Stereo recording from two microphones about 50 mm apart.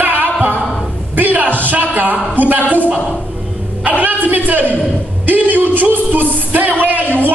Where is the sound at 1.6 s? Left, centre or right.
Right.